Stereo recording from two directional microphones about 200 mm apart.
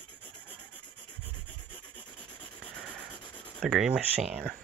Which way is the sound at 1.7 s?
25° left (ahead or behind).